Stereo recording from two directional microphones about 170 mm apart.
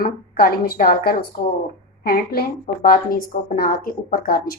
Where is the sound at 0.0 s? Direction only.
60° left (ahead or behind).